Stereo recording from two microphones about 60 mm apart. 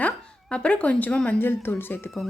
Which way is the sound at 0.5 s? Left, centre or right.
Centre.